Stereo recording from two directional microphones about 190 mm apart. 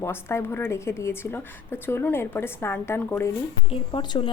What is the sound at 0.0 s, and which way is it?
A woman's voice, 15° left (ahead or behind).